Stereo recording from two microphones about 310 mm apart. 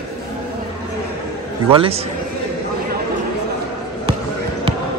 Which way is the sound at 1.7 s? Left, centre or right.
Centre.